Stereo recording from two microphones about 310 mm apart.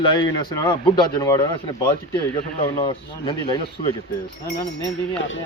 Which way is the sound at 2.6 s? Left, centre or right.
Centre.